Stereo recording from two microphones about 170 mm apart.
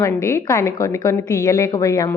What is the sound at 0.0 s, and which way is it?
A woman's voice, 15° left (ahead or behind).